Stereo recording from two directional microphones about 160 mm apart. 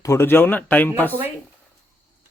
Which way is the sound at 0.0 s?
15° left (ahead or behind).